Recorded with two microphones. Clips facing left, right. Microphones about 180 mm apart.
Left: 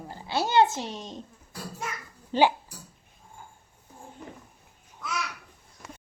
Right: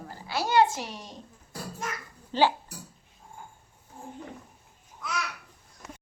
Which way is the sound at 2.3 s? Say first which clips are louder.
Left 2 dB; 15° left (ahead or behind).